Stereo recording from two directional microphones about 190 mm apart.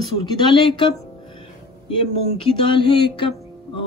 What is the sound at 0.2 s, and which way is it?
Speech, 25° left (ahead or behind).